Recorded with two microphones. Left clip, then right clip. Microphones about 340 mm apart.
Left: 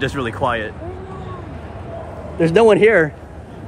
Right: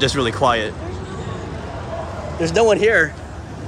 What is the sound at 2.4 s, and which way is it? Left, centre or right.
Speech, left.